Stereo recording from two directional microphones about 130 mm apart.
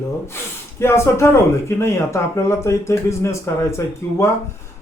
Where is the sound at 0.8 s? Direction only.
20° left (ahead or behind).